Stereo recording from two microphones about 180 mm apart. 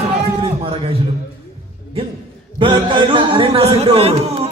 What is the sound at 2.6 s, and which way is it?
A man's voice, 25° right (ahead or behind).